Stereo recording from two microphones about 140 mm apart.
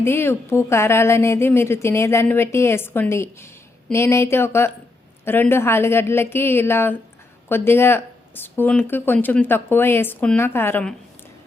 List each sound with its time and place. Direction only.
0.0 s speech: 15° left (ahead or behind)